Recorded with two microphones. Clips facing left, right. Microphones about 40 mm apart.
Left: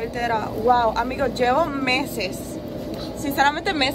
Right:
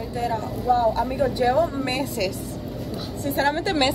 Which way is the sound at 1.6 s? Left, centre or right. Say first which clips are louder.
Left 2 dB; left.